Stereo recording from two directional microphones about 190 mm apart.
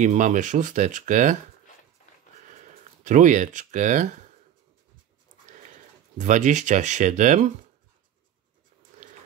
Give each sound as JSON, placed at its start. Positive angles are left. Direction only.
{"t": 0.0, "sound": "speech", "side_deg": -40}
{"t": 2.4, "sound": "a sound", "side_deg": -45}
{"t": 6.1, "sound": "speech", "side_deg": -40}